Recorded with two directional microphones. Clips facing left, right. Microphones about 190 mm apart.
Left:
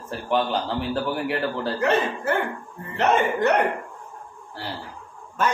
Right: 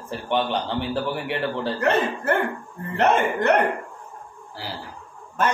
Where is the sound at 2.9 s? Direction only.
55° right (ahead or behind).